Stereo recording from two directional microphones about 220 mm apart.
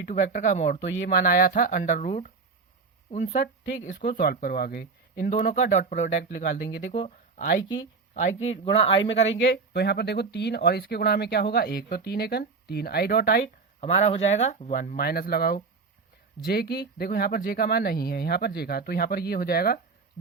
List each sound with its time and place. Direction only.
0.0 s speech: 35° left (ahead or behind)
6.9 s speech: 30° left (ahead or behind)
9.3 s speech: 55° left (ahead or behind)
13.8 s speech: 30° left (ahead or behind)